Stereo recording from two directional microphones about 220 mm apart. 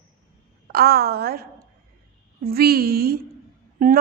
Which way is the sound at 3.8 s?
40° right (ahead or behind).